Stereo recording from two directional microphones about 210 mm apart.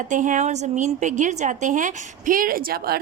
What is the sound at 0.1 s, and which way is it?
A woman's voice, 35° right (ahead or behind).